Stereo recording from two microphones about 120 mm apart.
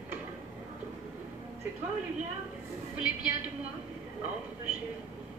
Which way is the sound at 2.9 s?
15° right (ahead or behind).